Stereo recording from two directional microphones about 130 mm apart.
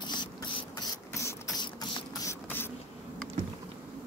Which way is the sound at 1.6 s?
35° left (ahead or behind).